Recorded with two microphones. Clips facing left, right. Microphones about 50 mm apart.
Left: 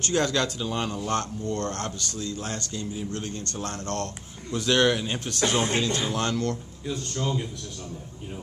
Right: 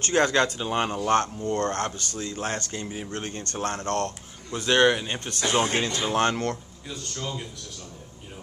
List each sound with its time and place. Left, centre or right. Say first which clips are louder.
0.0 s speech: right 3 dB; right
4.7 s speech: right 3 dB; centre
5.5 s speech: right 3 dB; right
6.9 s a man's voice: left 5 dB; centre